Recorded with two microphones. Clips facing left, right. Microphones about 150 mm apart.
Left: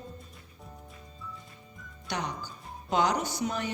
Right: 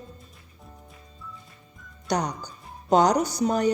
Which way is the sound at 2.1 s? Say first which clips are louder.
Right 8 dB; 40° right (ahead or behind).